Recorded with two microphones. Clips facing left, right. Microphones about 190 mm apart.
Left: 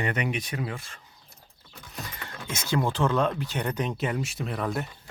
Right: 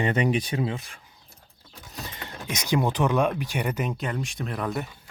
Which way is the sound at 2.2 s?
20° right (ahead or behind).